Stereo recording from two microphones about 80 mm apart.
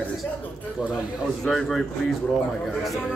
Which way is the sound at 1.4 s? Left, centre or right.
Centre.